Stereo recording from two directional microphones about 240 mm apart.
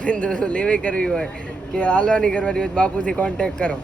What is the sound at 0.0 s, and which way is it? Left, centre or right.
Speech, centre.